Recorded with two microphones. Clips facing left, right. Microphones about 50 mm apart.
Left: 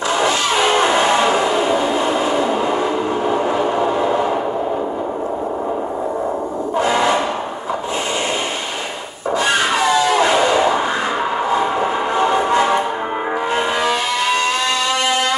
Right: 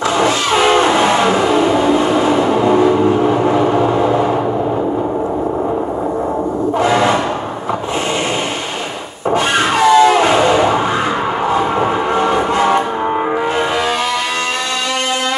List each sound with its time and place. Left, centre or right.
0.2 s vehicle: right
6.8 s a sound: right
9.8 s music: right
11.5 s train: right